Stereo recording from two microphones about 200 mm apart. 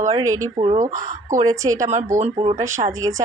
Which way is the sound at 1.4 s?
15° right (ahead or behind).